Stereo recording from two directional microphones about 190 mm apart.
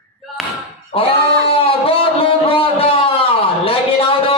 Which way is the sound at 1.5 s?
30° left (ahead or behind).